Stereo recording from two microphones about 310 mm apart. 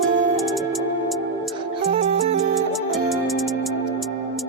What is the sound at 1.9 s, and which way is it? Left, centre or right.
Music, centre.